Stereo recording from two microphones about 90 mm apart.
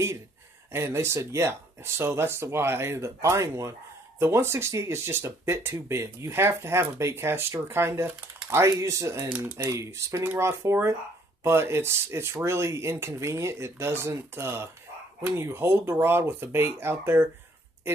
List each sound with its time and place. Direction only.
0.7 s speech: 30° right (ahead or behind)
9.3 s speech: 15° right (ahead or behind)
9.6 s speech: 30° right (ahead or behind)